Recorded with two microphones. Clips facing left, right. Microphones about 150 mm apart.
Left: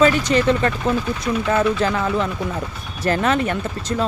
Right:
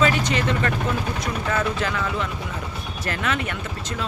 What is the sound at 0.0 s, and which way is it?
Speech, 40° left (ahead or behind).